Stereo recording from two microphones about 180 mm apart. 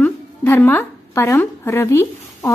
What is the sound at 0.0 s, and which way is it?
A woman's voice, 10° left (ahead or behind).